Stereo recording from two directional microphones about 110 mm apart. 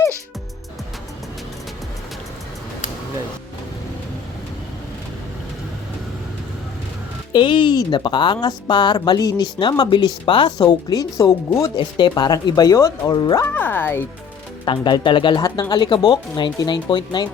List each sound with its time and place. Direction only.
7.3 s speech: 45° left (ahead or behind)
10.6 s speech: 35° left (ahead or behind)
11.8 s speech: 45° left (ahead or behind)
13.4 s speech: 20° left (ahead or behind)
14.6 s speech: 45° left (ahead or behind)